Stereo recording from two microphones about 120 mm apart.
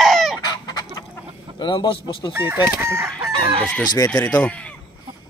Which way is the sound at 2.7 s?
20° right (ahead or behind).